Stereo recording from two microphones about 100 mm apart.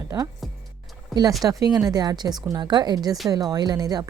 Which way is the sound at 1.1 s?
Centre (ahead or behind).